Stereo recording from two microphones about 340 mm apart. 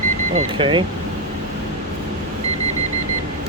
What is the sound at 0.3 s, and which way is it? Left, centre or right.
Speech, centre.